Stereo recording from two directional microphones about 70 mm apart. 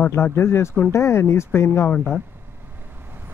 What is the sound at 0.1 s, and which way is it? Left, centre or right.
Speech, left.